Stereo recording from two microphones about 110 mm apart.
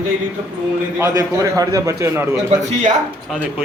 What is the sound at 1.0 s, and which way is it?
A man's voice, 30° right (ahead or behind).